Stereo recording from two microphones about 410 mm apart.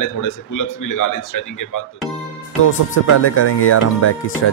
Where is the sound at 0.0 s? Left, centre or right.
Left.